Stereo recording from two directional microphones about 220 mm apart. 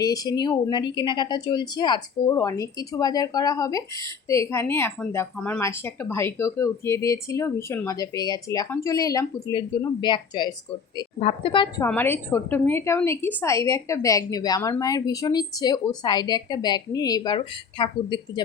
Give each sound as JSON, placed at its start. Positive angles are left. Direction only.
{"t": 0.0, "sound": "a woman's voice", "side_deg": 15}
{"t": 11.9, "sound": "a woman's voice", "side_deg": 10}